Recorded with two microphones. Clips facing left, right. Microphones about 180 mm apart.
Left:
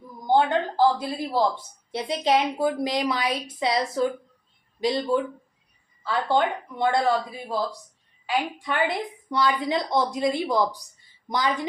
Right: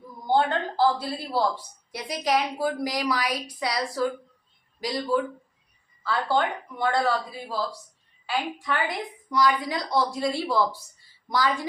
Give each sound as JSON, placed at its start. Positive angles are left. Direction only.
{"t": 0.3, "sound": "a woman's voice", "side_deg": 15}